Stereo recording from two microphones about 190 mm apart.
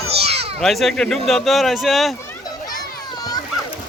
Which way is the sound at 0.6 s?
Centre (ahead or behind).